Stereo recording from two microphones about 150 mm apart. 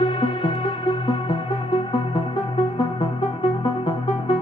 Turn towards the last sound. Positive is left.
turn(degrees=35)  # may be behind; listen again after turning